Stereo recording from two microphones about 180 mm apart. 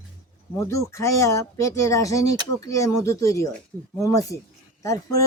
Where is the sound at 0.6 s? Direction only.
15° left (ahead or behind).